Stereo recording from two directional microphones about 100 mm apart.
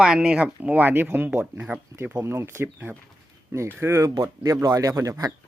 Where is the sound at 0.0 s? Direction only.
10° right (ahead or behind).